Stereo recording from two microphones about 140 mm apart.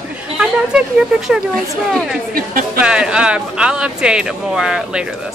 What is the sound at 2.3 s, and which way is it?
Speech, 90° right.